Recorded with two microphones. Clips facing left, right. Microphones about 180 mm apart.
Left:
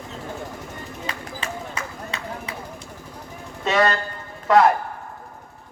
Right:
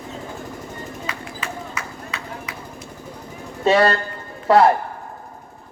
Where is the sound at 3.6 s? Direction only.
30° right (ahead or behind).